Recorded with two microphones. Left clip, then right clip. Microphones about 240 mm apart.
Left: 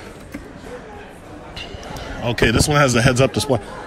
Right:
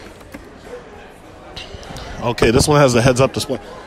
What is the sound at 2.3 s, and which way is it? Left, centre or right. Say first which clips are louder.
Speech: right 3 dB; right.